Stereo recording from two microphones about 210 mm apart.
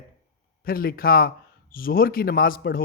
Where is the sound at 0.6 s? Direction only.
45° left (ahead or behind).